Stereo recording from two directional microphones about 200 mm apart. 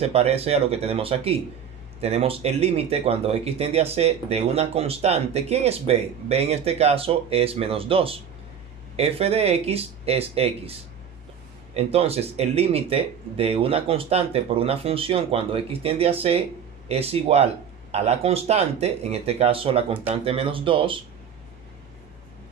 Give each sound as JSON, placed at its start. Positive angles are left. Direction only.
{"t": 0.0, "sound": "speech", "side_deg": -30}